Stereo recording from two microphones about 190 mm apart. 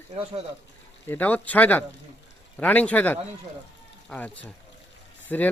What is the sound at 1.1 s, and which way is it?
Speech, 10° left (ahead or behind).